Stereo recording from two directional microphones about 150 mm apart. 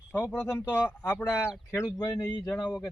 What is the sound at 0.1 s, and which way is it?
Speech, 10° left (ahead or behind).